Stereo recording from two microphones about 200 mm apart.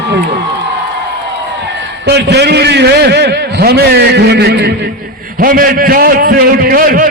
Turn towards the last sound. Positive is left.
turn(degrees=-45)  # may be behind; listen again after turning